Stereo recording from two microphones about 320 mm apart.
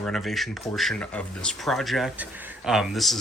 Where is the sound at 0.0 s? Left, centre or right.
Centre.